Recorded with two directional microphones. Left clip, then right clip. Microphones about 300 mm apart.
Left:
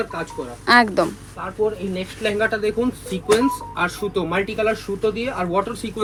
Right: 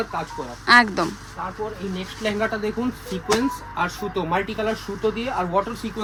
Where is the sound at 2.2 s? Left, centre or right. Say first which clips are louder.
Left 4 dB; centre.